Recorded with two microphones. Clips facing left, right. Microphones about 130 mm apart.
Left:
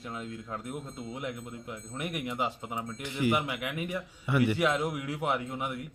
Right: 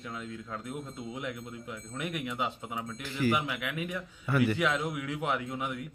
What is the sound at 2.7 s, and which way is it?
Speech, 20° left (ahead or behind).